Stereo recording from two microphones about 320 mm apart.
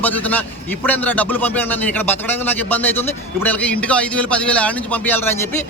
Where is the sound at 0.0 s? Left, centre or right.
Centre.